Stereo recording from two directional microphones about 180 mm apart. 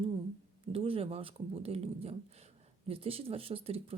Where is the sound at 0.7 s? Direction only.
30° right (ahead or behind).